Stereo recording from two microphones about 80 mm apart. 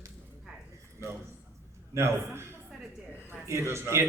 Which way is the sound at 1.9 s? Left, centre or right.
Right.